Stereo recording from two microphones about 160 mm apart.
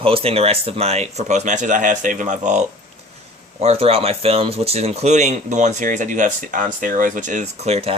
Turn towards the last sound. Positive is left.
turn(degrees=-40)  # may be behind; listen again after turning